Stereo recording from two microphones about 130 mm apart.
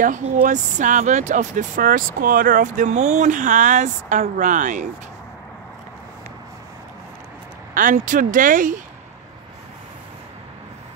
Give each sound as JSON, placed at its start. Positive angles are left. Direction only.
{"t": 0.0, "sound": "speech", "side_deg": -85}
{"t": 7.7, "sound": "speech", "side_deg": -80}